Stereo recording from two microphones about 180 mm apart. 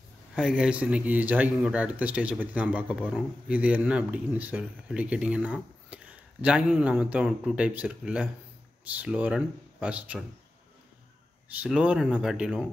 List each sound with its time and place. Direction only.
0.4 s speech: 5° right (ahead or behind)
11.5 s speech: 5° right (ahead or behind)